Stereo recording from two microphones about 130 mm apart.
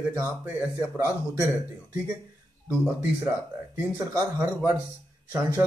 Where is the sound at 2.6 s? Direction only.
5° right (ahead or behind).